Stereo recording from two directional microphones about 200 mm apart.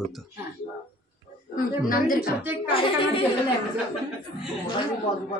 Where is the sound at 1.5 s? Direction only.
45° left (ahead or behind).